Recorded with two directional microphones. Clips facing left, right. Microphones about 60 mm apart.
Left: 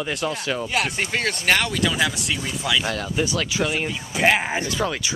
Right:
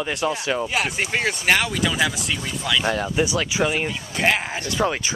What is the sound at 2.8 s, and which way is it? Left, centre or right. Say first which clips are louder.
Speech: right 3 dB; centre.